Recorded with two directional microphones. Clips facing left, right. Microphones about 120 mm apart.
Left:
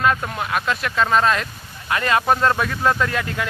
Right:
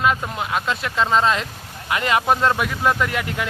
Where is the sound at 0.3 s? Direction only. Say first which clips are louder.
Left 1 dB; 25° right (ahead or behind).